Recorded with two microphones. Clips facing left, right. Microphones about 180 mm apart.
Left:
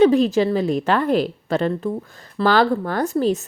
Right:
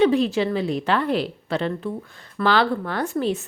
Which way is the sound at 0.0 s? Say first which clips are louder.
Left 4 dB; 45° left (ahead or behind).